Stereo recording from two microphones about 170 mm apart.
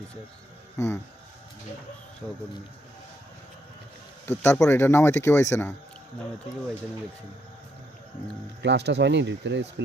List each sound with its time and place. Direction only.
0.8 s speech: 15° left (ahead or behind)
2.2 s speech: 10° left (ahead or behind)
4.3 s speech: 15° left (ahead or behind)
8.6 s speech: 85° right